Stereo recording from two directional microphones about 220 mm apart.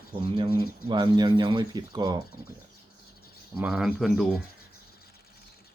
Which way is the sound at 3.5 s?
5° right (ahead or behind).